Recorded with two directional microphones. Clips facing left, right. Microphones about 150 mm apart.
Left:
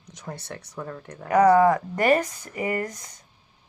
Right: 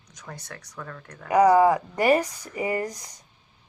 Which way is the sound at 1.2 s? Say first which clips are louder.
Even; 15° right (ahead or behind).